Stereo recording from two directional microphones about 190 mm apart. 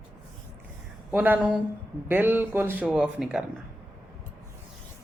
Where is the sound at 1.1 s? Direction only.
10° right (ahead or behind).